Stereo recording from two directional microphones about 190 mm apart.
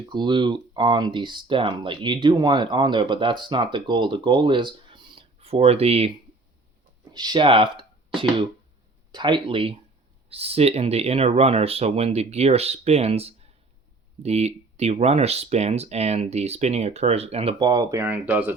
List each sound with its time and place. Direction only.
0.1 s speech: 25° right (ahead or behind)
7.1 s speech: 20° right (ahead or behind)